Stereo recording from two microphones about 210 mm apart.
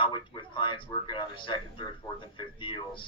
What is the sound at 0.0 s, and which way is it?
A man's voice, 25° left (ahead or behind).